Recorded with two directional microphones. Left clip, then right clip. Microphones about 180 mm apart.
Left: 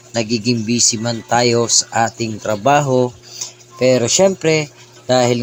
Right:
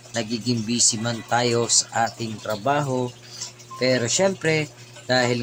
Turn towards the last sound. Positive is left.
turn(degrees=25)  # may be behind; listen again after turning